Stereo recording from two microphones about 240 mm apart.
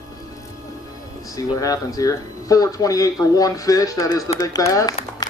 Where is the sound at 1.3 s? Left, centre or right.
Centre.